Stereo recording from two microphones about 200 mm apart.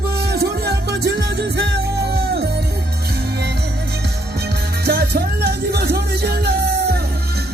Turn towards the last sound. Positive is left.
turn(degrees=-55)  # may be behind; listen again after turning